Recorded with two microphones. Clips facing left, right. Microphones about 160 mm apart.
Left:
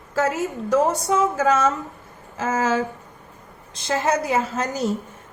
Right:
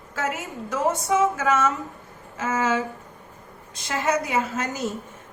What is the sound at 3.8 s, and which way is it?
A woman's voice, 30° left (ahead or behind).